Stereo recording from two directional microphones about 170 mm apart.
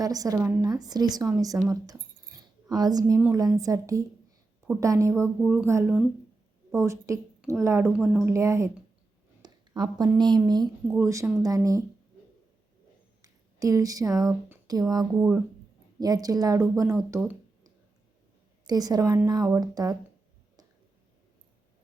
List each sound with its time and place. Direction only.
0.0 s a woman's voice: 20° right (ahead or behind)
3.2 s a woman's voice: 10° right (ahead or behind)
5.4 s a woman's voice: 5° right (ahead or behind)
5.6 s a woman's voice: 15° right (ahead or behind)
7.9 s a woman's voice: 5° right (ahead or behind)
8.3 s a woman's voice: 15° right (ahead or behind)
9.4 s a sound: 25° right (ahead or behind)
10.2 s a woman's voice: 25° right (ahead or behind)
13.2 s speech: 20° right (ahead or behind)
15.1 s a woman's voice: 10° right (ahead or behind)
16.0 s a woman's voice: 20° right (ahead or behind)
18.6 s a woman's voice: 20° right (ahead or behind)